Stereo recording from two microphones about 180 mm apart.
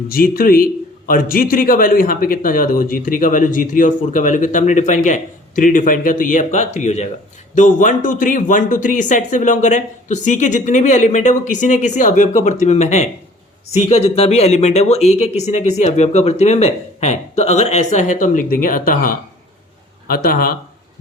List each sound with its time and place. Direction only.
0.1 s speech: 55° left (ahead or behind)